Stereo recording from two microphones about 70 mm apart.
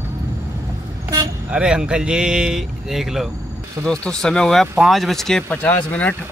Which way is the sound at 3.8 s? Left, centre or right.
Centre.